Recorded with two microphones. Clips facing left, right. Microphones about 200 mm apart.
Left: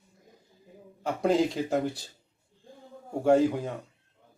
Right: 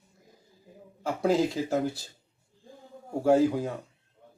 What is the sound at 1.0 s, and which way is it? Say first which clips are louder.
Speech: even; 5° right (ahead or behind).